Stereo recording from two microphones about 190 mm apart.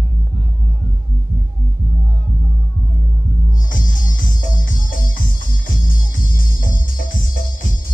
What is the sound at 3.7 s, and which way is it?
Music, 45° left (ahead or behind).